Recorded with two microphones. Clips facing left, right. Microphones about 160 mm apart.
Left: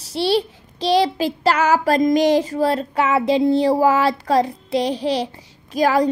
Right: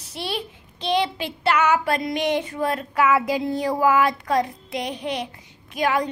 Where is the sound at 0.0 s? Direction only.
30° left (ahead or behind).